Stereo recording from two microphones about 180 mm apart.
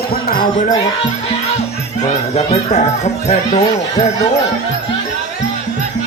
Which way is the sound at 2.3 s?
40° left (ahead or behind).